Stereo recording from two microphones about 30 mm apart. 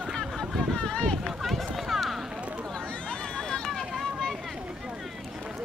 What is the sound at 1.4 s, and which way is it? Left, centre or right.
Run, centre.